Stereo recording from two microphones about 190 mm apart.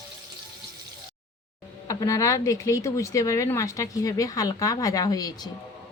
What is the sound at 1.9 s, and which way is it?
Speech, 15° left (ahead or behind).